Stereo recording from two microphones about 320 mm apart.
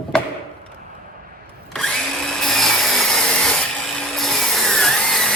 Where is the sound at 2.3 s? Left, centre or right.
Centre.